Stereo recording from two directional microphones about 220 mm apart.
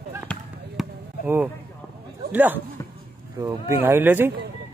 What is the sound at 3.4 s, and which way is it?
Speech, 10° right (ahead or behind).